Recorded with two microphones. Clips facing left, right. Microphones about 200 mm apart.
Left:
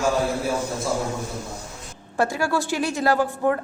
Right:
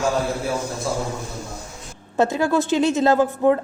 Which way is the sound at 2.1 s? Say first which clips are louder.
Right 4 dB; 20° right (ahead or behind).